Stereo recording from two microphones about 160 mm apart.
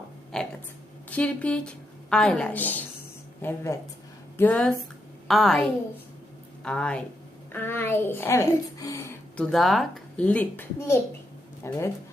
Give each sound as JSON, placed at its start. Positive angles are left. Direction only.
{"t": 0.3, "sound": "a sound", "side_deg": 5}
{"t": 1.1, "sound": "a woman's voice", "side_deg": 5}
{"t": 6.7, "sound": "a woman's voice", "side_deg": 5}
{"t": 9.4, "sound": "a woman's voice", "side_deg": 0}